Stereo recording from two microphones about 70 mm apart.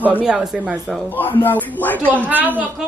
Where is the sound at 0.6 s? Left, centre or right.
Right.